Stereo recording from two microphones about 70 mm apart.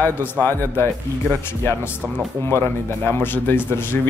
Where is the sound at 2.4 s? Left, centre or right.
Left.